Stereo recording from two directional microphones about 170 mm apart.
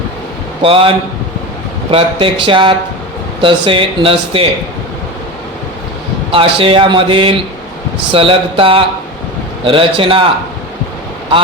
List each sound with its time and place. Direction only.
0.6 s a man's voice: 30° right (ahead or behind)
6.3 s a man's voice: 30° right (ahead or behind)